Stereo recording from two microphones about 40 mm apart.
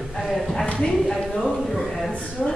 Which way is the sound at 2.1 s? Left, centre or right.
Left.